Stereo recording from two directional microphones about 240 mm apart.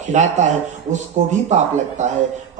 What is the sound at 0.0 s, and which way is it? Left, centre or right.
A man's voice, right.